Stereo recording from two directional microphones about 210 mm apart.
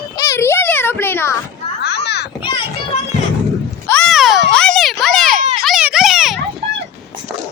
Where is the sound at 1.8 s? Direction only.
55° left (ahead or behind).